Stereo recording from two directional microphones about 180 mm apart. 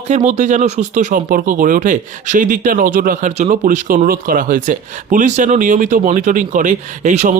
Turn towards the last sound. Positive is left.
turn(degrees=-40)  # may be behind; listen again after turning